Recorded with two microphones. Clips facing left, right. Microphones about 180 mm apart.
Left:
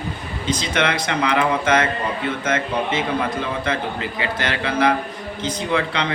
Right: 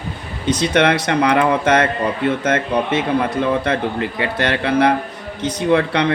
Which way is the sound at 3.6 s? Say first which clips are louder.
Right 4 dB; 60° right (ahead or behind).